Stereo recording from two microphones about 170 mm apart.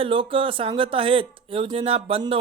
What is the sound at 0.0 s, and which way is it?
Speech, 30° right (ahead or behind).